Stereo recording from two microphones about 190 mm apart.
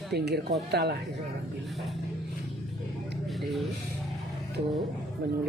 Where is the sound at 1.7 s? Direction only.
Centre (ahead or behind).